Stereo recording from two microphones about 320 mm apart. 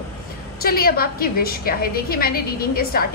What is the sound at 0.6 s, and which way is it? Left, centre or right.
A woman's voice, left.